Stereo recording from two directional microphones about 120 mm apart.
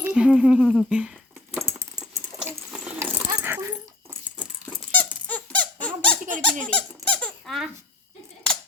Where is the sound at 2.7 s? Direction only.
10° right (ahead or behind).